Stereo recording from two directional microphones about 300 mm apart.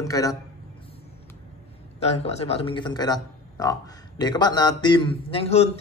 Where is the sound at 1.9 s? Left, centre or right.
Left.